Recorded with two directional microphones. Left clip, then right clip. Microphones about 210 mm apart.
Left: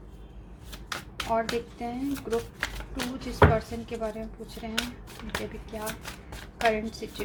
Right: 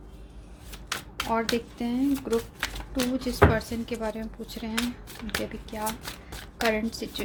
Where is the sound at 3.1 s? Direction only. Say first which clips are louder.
Left 1 dB; 50° right (ahead or behind).